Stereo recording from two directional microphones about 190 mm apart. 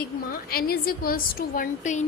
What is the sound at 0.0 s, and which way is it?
A woman's voice, 55° left (ahead or behind).